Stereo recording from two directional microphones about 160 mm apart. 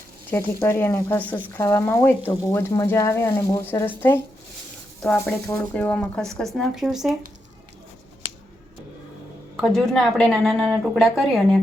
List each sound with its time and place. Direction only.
0.3 s speech: 15° left (ahead or behind); by 7.1 s centre (ahead or behind)
9.6 s speech: 5° left (ahead or behind)